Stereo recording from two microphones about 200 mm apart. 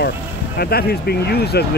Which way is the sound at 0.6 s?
50° left (ahead or behind).